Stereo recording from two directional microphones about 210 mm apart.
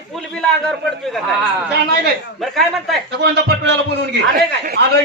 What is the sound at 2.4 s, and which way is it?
Speech, centre (ahead or behind).